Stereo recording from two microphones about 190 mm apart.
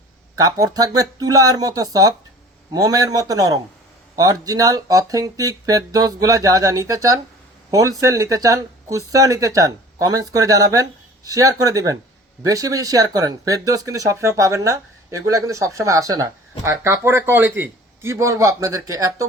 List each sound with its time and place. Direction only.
0.3 s speech: 20° right (ahead or behind)